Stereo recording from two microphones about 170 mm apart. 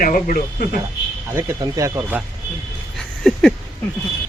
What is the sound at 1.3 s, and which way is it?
Speech, 20° right (ahead or behind).